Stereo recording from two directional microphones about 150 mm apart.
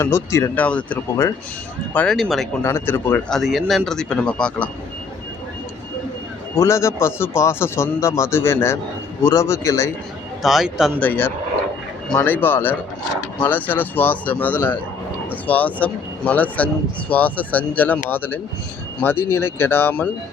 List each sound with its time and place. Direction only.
0.0 s a man's voice: 20° left (ahead or behind); by 2.5 s centre (ahead or behind)
2.6 s speech: 15° left (ahead or behind)
3.2 s a man's voice: centre (ahead or behind)
6.6 s a man's voice: 20° left (ahead or behind)
10.4 s a man's voice: centre (ahead or behind)
11.0 s speech: 15° left (ahead or behind)